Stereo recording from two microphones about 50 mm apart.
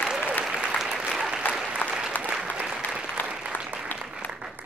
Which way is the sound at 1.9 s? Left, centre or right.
Centre.